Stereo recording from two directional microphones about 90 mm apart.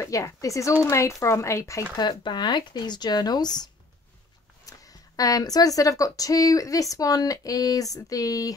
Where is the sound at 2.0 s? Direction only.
55° left (ahead or behind).